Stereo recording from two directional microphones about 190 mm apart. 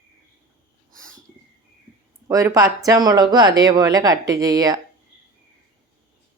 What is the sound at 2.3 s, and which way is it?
Speech, 20° right (ahead or behind).